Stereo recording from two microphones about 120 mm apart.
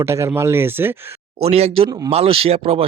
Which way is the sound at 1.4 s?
60° right (ahead or behind).